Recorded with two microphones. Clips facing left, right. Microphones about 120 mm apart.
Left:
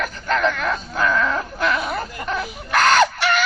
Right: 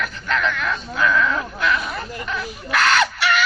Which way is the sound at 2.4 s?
45° left (ahead or behind).